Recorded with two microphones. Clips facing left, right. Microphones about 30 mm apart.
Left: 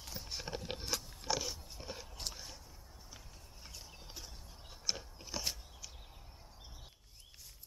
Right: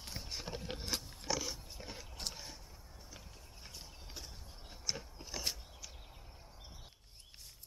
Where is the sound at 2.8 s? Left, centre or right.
Centre.